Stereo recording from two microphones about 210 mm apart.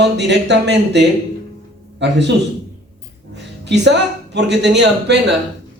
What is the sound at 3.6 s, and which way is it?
Speech, 55° right (ahead or behind).